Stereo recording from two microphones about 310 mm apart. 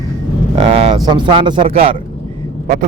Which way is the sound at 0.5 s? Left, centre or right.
Centre.